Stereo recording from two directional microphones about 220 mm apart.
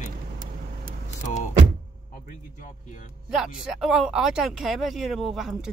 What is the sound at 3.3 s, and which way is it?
Speech, centre (ahead or behind).